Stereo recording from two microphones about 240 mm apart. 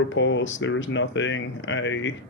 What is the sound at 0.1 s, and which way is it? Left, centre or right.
Speech, left.